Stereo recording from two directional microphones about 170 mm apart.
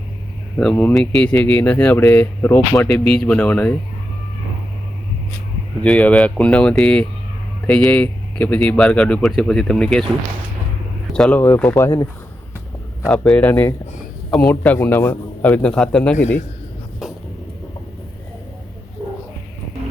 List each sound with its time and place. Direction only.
0.6 s a man's voice: 5° left (ahead or behind)
5.8 s a man's voice: 10° left (ahead or behind)
11.1 s a man's voice: 5° left (ahead or behind)
13.1 s a man's voice: 5° left (ahead or behind)